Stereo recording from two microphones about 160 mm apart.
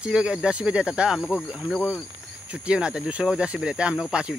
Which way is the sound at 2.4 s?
5° right (ahead or behind).